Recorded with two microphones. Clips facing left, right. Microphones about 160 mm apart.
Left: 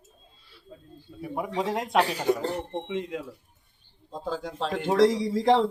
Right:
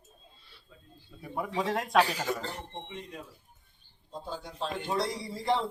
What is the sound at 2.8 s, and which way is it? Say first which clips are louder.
Speech: left 11 dB; 90° left.